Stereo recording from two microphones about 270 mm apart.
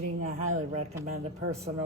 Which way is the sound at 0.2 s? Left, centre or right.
Right.